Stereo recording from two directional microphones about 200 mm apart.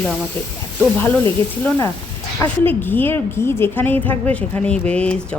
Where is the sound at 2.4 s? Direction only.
10° left (ahead or behind).